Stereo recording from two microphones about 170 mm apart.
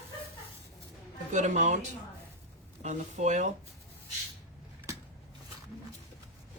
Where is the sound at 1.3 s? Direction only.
45° right (ahead or behind).